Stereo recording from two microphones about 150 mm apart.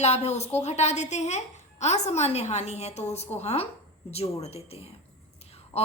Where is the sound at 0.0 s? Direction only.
45° left (ahead or behind).